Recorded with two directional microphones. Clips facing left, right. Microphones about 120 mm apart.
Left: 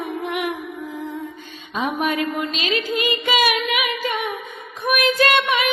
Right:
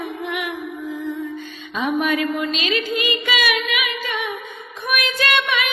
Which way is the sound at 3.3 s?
40° left (ahead or behind).